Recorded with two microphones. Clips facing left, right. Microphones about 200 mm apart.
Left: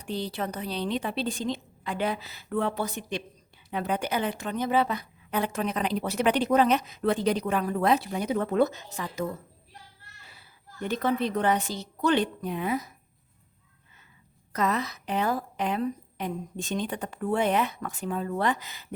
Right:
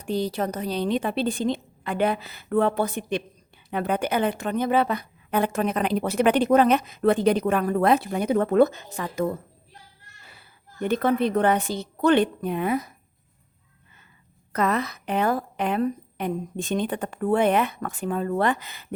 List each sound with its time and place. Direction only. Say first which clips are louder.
0.0 s a woman's voice: right 6 dB; 45° right (ahead or behind)
14.5 s a woman's voice: right 3 dB; 55° right (ahead or behind)